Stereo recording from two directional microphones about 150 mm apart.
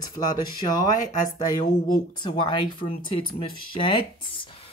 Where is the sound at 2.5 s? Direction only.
30° left (ahead or behind).